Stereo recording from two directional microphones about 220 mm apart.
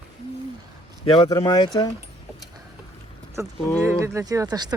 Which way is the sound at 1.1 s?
20° left (ahead or behind).